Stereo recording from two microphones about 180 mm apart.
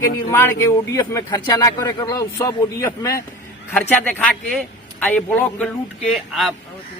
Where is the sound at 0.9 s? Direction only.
20° left (ahead or behind).